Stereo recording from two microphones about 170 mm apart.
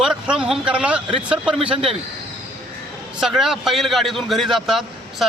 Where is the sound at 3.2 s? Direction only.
5° right (ahead or behind).